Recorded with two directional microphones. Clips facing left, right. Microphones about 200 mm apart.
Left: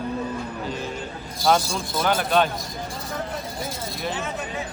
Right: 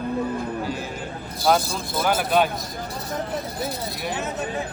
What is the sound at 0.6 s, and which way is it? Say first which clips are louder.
Music: right 1 dB; 10° right (ahead or behind).